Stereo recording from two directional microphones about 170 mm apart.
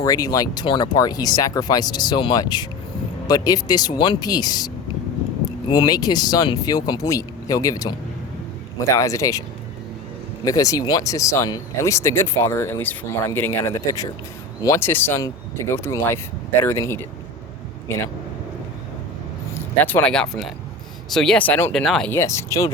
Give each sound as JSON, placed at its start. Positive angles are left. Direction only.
{"t": 0.0, "sound": "speech", "side_deg": 20}
{"t": 10.4, "sound": "speech", "side_deg": 20}
{"t": 19.8, "sound": "speech", "side_deg": 10}
{"t": 22.2, "sound": "speech", "side_deg": 15}